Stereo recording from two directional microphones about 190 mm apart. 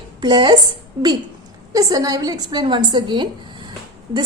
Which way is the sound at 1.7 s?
20° right (ahead or behind).